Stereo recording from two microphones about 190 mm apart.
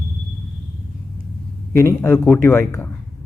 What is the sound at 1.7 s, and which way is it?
Mantra, 15° left (ahead or behind).